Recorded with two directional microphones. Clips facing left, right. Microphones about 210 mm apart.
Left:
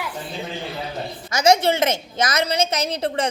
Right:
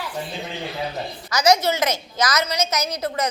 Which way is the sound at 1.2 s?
25° left (ahead or behind).